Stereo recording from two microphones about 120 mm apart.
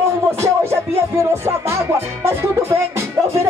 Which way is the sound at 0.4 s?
25° right (ahead or behind).